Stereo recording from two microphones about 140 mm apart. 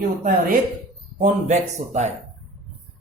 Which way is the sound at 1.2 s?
55° right (ahead or behind).